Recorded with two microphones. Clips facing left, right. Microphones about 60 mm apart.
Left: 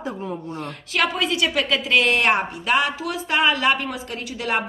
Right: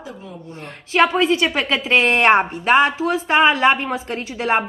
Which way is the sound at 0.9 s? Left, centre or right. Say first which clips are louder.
Right 7 dB; right.